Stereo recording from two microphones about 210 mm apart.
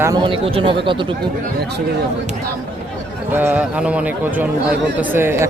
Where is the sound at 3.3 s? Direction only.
10° right (ahead or behind).